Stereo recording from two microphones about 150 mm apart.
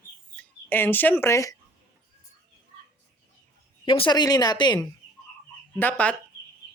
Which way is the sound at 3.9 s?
30° left (ahead or behind).